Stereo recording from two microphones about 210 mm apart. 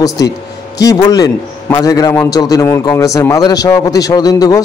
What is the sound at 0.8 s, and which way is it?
A man's voice, 15° left (ahead or behind).